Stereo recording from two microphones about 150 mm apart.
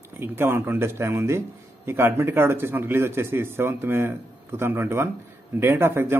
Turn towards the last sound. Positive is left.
turn(degrees=-15)  # may be behind; listen again after turning